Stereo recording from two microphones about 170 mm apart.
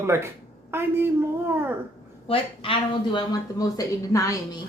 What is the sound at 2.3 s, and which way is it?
Speech, 30° left (ahead or behind).